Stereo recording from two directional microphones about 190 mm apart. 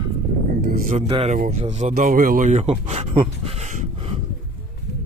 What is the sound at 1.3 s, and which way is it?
Speech, 45° right (ahead or behind).